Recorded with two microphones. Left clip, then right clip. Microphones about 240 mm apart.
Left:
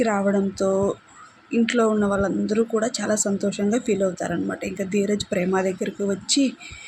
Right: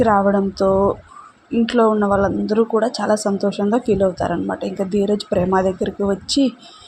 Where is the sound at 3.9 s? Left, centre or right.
Centre.